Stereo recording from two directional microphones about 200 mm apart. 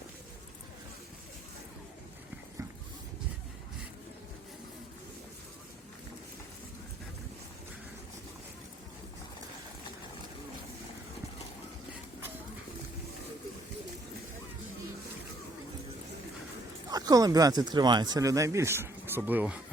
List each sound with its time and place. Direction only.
16.9 s speech: 20° right (ahead or behind)